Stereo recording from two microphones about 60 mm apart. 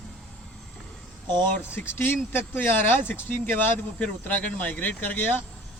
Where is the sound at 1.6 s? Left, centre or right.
Left.